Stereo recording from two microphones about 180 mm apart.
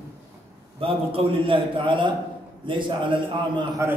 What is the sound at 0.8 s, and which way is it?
A man's voice, 30° right (ahead or behind).